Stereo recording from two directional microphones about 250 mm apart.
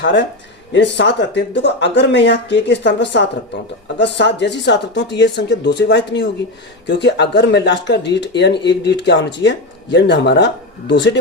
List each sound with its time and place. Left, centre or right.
0.0 s speech: left